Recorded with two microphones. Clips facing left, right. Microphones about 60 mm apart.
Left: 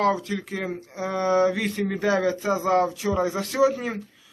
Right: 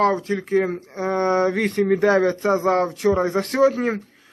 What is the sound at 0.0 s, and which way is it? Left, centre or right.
A man's voice, right.